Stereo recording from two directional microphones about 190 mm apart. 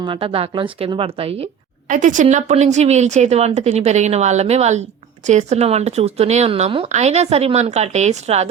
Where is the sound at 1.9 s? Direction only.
40° right (ahead or behind).